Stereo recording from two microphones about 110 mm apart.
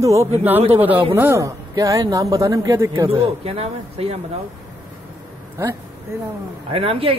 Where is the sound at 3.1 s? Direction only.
65° right (ahead or behind).